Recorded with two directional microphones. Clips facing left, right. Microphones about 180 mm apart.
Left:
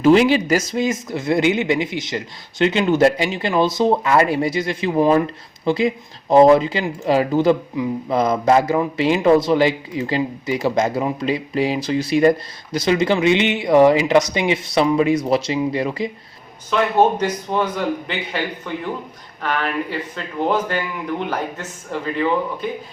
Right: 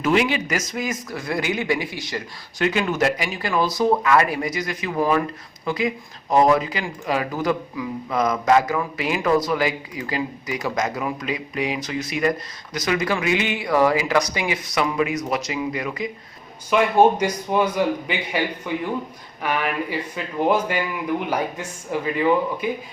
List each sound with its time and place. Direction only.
0.0 s speech: 30° left (ahead or behind)
16.6 s a man's voice: 10° right (ahead or behind)